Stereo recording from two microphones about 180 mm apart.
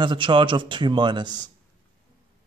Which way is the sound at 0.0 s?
25° right (ahead or behind).